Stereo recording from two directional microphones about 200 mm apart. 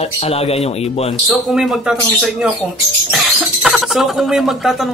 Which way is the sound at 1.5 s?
5° right (ahead or behind).